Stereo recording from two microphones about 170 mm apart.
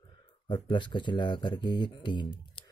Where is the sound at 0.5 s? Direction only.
30° left (ahead or behind).